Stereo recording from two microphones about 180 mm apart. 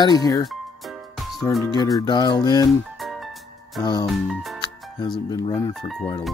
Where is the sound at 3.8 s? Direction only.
25° left (ahead or behind).